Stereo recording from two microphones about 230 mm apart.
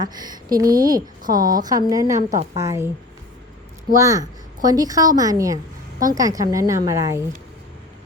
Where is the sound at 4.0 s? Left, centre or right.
Centre.